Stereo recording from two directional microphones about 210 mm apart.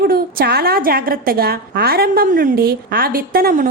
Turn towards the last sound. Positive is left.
turn(degrees=-40)  # may be behind; listen again after turning